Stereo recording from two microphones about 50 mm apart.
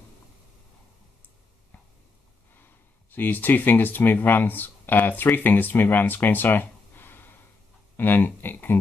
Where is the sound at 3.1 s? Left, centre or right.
Left.